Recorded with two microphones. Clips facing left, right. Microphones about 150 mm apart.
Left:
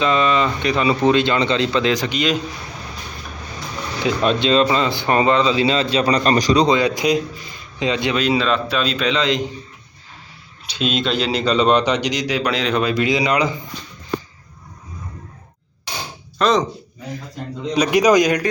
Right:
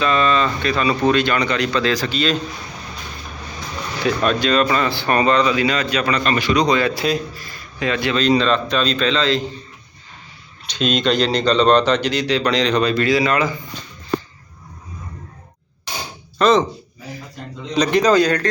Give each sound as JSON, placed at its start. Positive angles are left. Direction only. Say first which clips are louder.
{"t": 0.0, "sound": "speech", "louder": "even", "side_deg": 20}
{"t": 4.0, "sound": "speech", "louder": "even", "side_deg": 20}
{"t": 6.7, "sound": "speech", "louder": "left 2 dB", "side_deg": 15}
{"t": 8.2, "sound": "speech", "louder": "right 5 dB", "side_deg": 5}
{"t": 10.7, "sound": "speech", "louder": "right 2 dB", "side_deg": 5}
{"t": 16.4, "sound": "a sound", "louder": "right 2 dB", "side_deg": 0}
{"t": 17.7, "sound": "speech", "louder": "even", "side_deg": 10}